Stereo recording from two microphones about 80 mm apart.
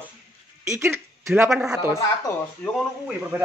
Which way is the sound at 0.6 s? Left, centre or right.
Right.